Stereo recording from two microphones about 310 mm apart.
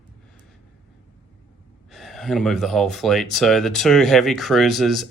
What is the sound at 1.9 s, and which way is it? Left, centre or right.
Speech, centre.